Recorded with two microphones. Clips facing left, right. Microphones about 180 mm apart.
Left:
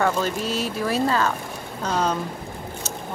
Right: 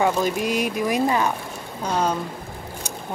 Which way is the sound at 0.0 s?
15° right (ahead or behind).